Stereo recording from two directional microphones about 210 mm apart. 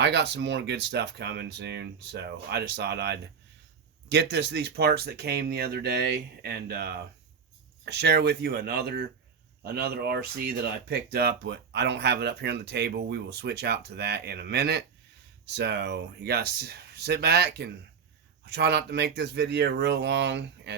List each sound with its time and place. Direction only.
0.0 s speech: 55° right (ahead or behind)